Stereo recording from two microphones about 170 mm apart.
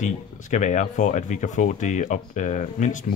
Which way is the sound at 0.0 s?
45° left (ahead or behind).